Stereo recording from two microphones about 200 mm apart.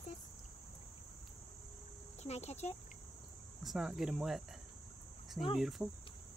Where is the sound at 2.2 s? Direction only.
35° left (ahead or behind).